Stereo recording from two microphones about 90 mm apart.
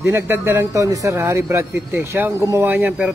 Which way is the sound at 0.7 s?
35° right (ahead or behind).